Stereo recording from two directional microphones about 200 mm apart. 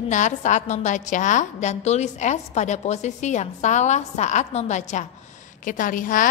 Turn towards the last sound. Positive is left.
turn(degrees=40)  # may be behind; listen again after turning